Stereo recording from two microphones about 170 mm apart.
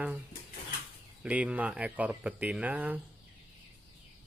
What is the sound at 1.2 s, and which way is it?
Speech, 5° right (ahead or behind).